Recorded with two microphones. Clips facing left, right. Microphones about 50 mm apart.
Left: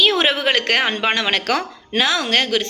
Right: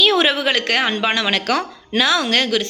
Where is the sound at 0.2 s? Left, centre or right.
Left.